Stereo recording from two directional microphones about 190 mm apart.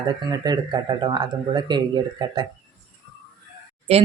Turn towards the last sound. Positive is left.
turn(degrees=-35)  # may be behind; listen again after turning